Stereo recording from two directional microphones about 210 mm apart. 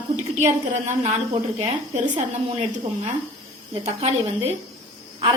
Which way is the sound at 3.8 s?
30° right (ahead or behind).